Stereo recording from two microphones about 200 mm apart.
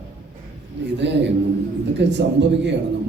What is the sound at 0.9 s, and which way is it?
A man's voice, 60° right (ahead or behind).